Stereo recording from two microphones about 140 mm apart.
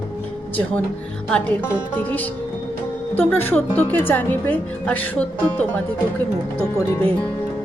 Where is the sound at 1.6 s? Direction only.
10° left (ahead or behind).